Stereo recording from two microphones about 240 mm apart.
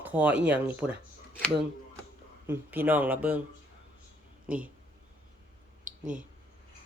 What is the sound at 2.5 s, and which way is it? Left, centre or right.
Speech, centre.